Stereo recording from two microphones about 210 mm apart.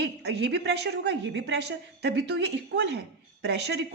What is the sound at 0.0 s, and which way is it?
A woman's voice, 55° right (ahead or behind).